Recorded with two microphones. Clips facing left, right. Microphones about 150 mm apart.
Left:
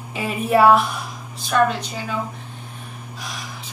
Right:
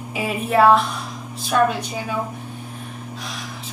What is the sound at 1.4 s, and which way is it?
Speech, 5° right (ahead or behind).